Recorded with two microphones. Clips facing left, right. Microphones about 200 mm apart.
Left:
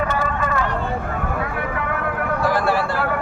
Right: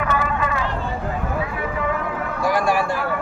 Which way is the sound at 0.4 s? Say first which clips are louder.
Left 2 dB; 50° left (ahead or behind).